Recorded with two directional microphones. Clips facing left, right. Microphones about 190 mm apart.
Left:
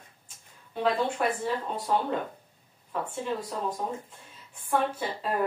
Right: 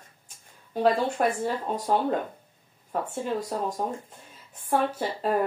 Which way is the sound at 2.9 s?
45° right (ahead or behind).